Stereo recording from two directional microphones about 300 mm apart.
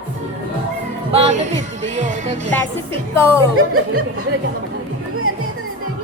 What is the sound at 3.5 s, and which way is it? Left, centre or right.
Speech, right.